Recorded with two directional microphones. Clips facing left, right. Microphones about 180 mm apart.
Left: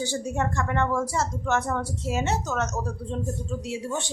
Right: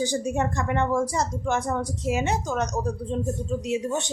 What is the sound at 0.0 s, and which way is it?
A woman's voice, 15° right (ahead or behind).